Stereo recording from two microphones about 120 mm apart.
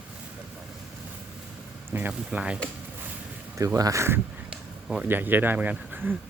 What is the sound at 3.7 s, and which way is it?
Speech, 25° right (ahead or behind).